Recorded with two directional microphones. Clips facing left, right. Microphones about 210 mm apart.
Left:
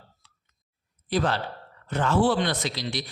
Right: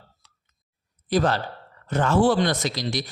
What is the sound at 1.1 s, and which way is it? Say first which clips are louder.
Speech: right 3 dB; 45° right (ahead or behind).